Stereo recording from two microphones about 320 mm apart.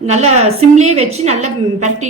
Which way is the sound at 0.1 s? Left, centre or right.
Right.